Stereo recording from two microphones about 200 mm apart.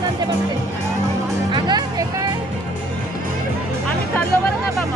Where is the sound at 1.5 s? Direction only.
20° right (ahead or behind).